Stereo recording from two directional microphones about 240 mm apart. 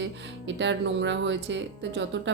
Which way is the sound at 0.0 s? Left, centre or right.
Right.